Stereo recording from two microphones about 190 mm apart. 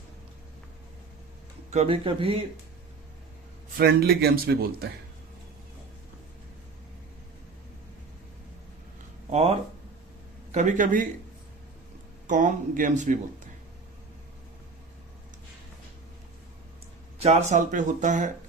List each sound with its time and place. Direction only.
1.7 s speech: 30° right (ahead or behind)
3.8 s speech: 55° right (ahead or behind)
9.3 s speech: 30° right (ahead or behind)
12.3 s speech: 40° right (ahead or behind)
17.2 s speech: 35° right (ahead or behind)